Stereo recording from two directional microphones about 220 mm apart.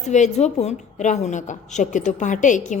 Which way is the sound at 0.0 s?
30° left (ahead or behind).